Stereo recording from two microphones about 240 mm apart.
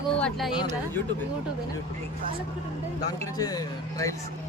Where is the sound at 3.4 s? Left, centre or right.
Centre.